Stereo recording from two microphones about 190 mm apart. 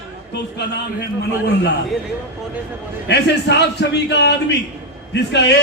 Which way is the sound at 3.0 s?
60° left (ahead or behind).